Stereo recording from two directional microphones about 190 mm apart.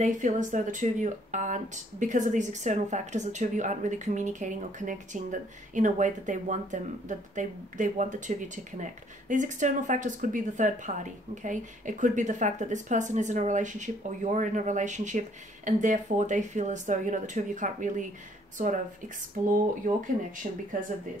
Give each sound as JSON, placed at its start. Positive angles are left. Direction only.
{"t": 0.0, "sound": "speech", "side_deg": -40}
{"t": 19.4, "sound": "speech", "side_deg": -45}